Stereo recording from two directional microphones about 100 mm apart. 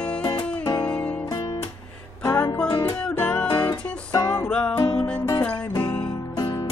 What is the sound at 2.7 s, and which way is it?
Music, 45° left (ahead or behind).